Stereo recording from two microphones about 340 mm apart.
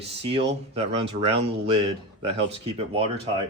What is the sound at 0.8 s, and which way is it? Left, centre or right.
Speech, centre.